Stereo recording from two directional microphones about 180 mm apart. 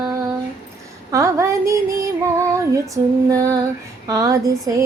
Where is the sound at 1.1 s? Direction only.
15° right (ahead or behind).